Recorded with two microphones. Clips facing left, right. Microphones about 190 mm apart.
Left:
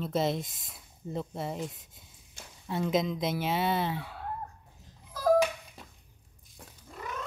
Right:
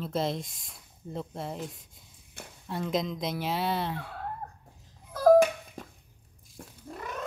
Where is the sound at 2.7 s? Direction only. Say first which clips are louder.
Left 2 dB; centre (ahead or behind).